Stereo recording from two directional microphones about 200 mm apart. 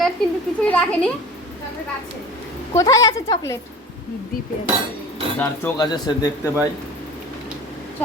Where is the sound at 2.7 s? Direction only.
15° left (ahead or behind).